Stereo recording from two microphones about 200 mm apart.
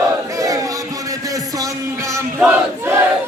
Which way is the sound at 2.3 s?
10° right (ahead or behind).